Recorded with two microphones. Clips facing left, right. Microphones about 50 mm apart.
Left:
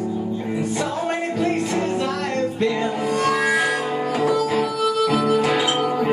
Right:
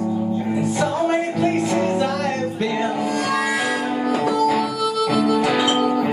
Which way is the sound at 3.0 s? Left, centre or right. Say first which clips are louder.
Left 1 dB; centre.